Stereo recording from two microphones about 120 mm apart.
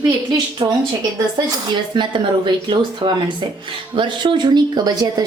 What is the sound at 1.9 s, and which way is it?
A woman's voice, 40° right (ahead or behind).